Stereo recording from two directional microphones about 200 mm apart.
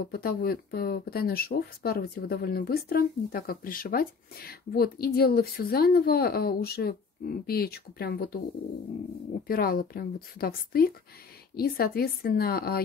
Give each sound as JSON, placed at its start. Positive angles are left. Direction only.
{"t": 0.1, "sound": "speech", "side_deg": 50}
{"t": 9.5, "sound": "speech", "side_deg": 45}